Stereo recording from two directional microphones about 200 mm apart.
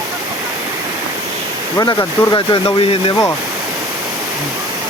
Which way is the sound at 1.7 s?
15° left (ahead or behind).